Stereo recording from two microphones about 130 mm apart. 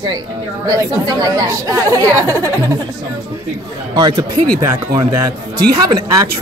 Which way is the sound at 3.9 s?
30° right (ahead or behind).